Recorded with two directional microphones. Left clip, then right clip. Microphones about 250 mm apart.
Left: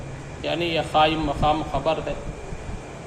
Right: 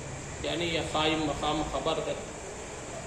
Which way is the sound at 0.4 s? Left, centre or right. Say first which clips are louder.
Left 7 dB; left.